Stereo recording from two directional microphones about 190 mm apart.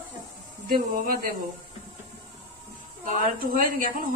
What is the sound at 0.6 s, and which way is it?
Speech, 50° right (ahead or behind).